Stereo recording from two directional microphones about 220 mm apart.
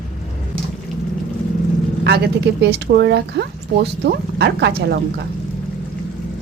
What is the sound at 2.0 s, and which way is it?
Speech, 50° right (ahead or behind).